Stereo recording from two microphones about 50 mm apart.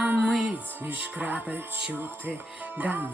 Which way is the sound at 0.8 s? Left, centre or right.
Right.